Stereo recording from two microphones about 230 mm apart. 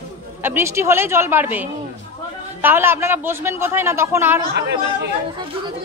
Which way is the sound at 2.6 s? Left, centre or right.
Centre.